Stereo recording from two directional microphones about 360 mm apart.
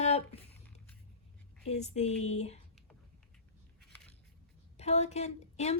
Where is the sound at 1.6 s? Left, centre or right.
Centre.